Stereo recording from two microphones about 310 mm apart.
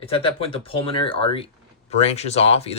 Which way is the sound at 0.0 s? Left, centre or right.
Centre.